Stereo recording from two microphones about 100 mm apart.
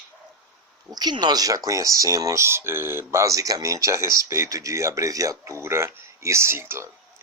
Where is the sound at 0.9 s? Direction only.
45° right (ahead or behind); by 6.9 s 25° right (ahead or behind).